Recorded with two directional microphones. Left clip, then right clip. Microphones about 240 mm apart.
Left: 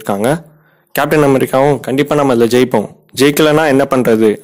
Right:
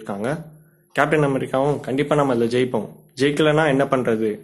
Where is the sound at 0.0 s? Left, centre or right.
Left.